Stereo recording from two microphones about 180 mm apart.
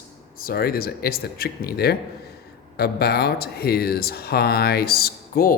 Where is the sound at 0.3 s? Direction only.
55° left (ahead or behind).